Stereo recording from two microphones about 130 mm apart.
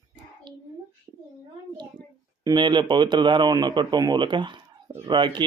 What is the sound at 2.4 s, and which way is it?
Speech, 35° right (ahead or behind).